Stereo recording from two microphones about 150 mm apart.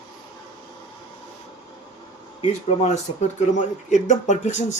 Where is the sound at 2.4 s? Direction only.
45° left (ahead or behind).